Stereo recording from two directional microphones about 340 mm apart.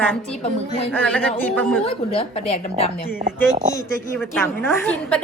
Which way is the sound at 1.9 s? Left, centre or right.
Centre.